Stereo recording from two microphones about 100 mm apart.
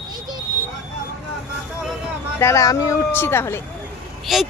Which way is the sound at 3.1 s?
20° left (ahead or behind).